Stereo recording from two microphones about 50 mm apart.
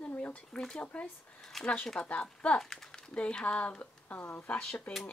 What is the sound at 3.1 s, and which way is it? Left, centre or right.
Speech, left.